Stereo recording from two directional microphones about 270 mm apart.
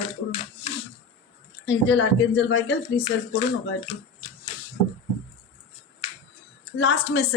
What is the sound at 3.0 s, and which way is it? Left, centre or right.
Speech, left.